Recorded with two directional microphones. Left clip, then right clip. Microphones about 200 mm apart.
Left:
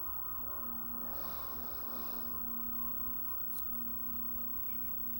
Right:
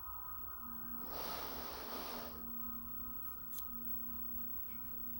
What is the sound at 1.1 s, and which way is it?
Snort, 45° right (ahead or behind).